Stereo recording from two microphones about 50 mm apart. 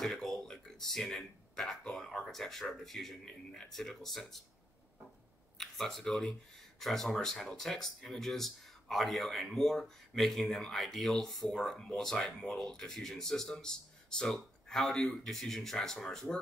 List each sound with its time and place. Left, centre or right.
0.0 s a sound: centre
2.0 s speech: centre
5.6 s speech: centre
11.5 s speech: centre